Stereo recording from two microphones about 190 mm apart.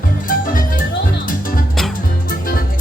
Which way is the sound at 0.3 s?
45° left (ahead or behind).